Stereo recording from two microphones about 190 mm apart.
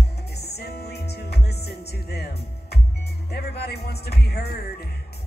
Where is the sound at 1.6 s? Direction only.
60° left (ahead or behind).